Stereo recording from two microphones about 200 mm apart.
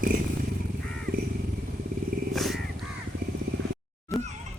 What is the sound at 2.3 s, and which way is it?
Wild animals, centre (ahead or behind).